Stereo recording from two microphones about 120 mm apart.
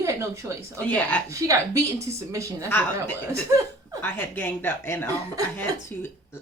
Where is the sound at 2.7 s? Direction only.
15° left (ahead or behind).